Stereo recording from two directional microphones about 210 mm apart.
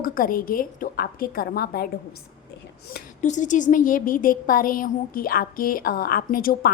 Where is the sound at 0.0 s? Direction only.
40° left (ahead or behind).